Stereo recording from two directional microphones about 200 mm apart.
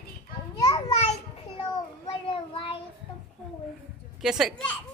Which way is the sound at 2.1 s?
25° left (ahead or behind).